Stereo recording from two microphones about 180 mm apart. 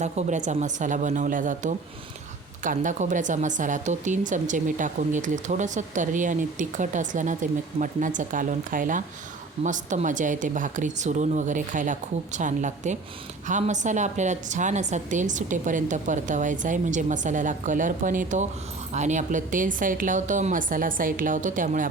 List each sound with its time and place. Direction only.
0.0 s a woman's voice: 40° right (ahead or behind)